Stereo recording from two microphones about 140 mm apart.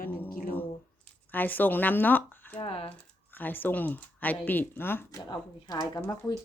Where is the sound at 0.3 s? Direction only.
90° left.